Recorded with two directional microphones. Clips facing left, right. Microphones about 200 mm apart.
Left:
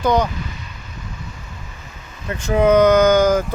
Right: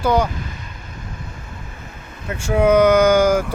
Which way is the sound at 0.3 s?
50° right (ahead or behind).